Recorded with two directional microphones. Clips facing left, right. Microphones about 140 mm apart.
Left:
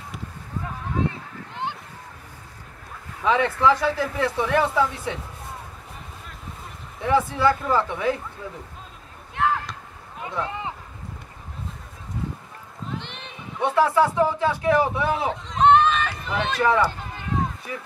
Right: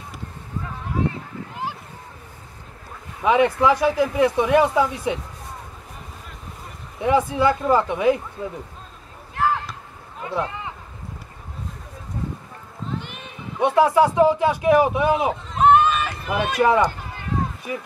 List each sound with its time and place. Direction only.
1.5 s a sound: 5° right (ahead or behind)
3.2 s speech: 15° right (ahead or behind)
7.0 s speech: 15° right (ahead or behind)
9.3 s basketball bounce: centre (ahead or behind)
10.2 s speech: 20° left (ahead or behind)
13.0 s speech: 5° right (ahead or behind)
15.5 s run: 5° right (ahead or behind)